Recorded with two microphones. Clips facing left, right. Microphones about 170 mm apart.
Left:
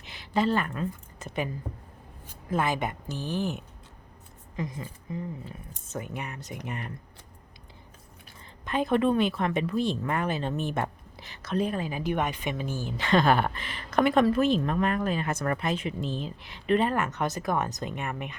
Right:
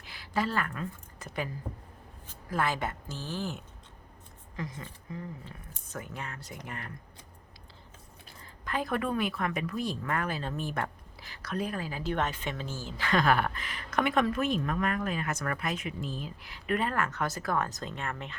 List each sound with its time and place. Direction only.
0.0 s a woman's voice: 20° left (ahead or behind)
2.5 s a woman's voice: 20° left (ahead or behind)
8.6 s a woman's voice: 20° left (ahead or behind)